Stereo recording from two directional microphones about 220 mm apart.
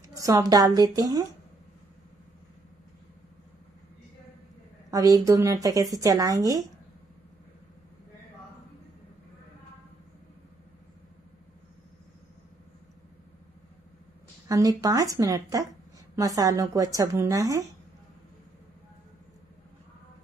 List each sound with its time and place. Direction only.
0.1 s speech: 15° right (ahead or behind)
4.9 s speech: 15° right (ahead or behind)
14.5 s speech: 15° right (ahead or behind)